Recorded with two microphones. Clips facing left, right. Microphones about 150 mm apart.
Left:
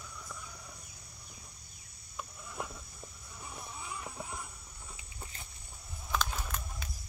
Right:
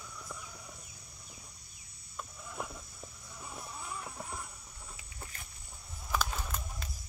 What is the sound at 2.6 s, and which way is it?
Cricket, centre (ahead or behind).